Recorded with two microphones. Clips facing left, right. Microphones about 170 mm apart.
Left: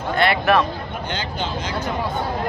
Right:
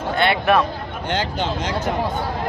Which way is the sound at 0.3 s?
Centre (ahead or behind).